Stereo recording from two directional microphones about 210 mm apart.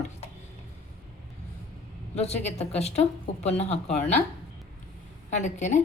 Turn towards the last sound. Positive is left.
turn(degrees=35)  # may be behind; listen again after turning